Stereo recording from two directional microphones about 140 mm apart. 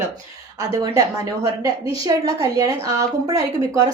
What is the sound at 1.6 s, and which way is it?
A woman's voice, 25° right (ahead or behind).